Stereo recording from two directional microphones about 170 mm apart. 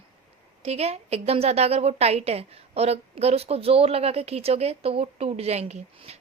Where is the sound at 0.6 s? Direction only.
35° right (ahead or behind).